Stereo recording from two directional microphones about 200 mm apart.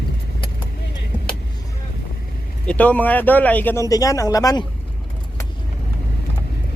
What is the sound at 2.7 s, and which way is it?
Speech, 5° left (ahead or behind).